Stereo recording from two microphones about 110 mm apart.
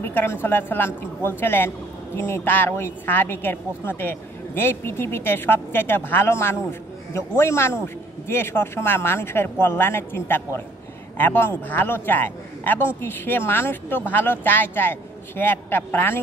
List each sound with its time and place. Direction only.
0.0 s a woman's voice: 20° left (ahead or behind)